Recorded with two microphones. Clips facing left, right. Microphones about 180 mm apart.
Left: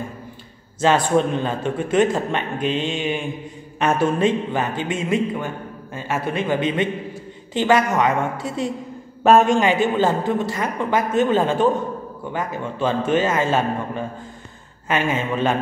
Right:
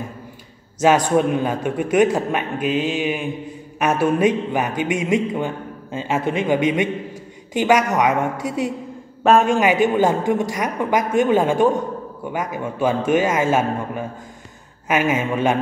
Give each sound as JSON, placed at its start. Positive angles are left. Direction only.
{"t": 0.7, "sound": "a man's voice", "side_deg": -10}
{"t": 9.2, "sound": "a man's voice", "side_deg": 0}